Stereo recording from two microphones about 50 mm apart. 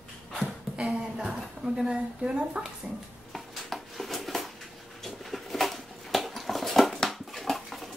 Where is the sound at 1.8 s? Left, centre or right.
Centre.